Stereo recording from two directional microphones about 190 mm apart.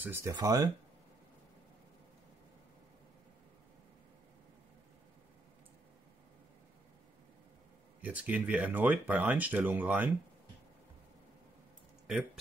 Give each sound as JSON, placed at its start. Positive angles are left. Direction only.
{"t": 0.0, "sound": "speech", "side_deg": -15}
{"t": 8.0, "sound": "speech", "side_deg": -10}